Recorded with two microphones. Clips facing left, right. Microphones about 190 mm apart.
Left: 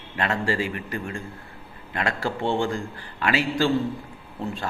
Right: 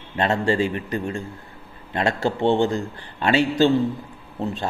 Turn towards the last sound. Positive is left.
turn(degrees=-25)  # may be behind; listen again after turning